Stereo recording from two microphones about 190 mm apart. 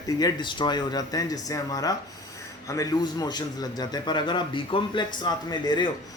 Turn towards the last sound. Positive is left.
turn(degrees=25)  # may be behind; listen again after turning